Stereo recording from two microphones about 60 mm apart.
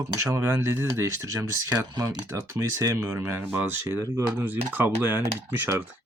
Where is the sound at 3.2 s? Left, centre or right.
Right.